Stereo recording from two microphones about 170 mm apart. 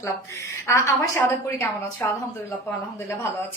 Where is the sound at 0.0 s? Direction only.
15° left (ahead or behind).